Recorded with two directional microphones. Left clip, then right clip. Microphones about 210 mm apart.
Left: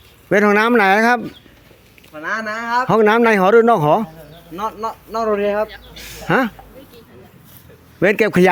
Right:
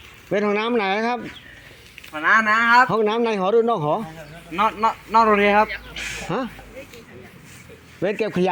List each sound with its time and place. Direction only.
0.3 s speech: 40° left (ahead or behind)
2.1 s speech: 10° left (ahead or behind)
2.9 s speech: 40° left (ahead or behind)
4.5 s speech: 15° right (ahead or behind)
6.2 s speech: 45° left (ahead or behind)
8.0 s speech: 45° left (ahead or behind)